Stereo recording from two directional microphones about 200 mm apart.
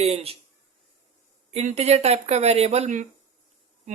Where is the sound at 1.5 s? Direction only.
35° right (ahead or behind).